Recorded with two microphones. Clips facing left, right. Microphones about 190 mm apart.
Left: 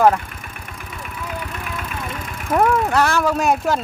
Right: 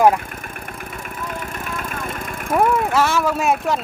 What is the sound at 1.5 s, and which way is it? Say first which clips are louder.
Vehicle: right 1 dB; 45° right (ahead or behind).